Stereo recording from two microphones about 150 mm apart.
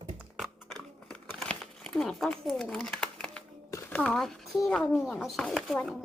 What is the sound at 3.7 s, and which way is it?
Speech, 10° left (ahead or behind).